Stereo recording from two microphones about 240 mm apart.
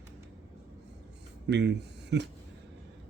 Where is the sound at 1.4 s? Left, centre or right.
Right.